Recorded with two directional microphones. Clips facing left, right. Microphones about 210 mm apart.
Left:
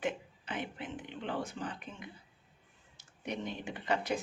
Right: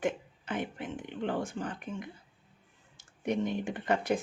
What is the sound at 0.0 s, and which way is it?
Speech, 45° right (ahead or behind).